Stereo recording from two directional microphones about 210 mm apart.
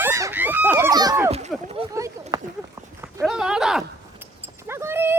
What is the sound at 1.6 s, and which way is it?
Speech, 25° right (ahead or behind).